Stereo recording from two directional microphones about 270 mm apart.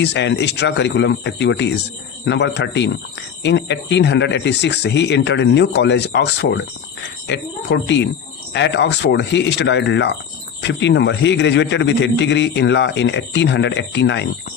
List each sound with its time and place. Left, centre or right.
0.0 s a man's voice: left